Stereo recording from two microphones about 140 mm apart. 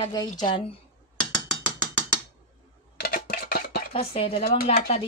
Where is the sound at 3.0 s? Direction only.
90° left.